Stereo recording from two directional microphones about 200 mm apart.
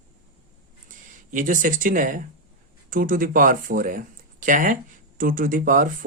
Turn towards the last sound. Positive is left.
turn(degrees=-40)  # may be behind; listen again after turning